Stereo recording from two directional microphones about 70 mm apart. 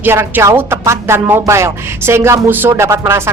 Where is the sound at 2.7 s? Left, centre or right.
Right.